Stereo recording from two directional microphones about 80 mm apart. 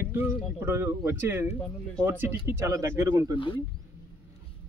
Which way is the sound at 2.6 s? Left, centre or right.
Right.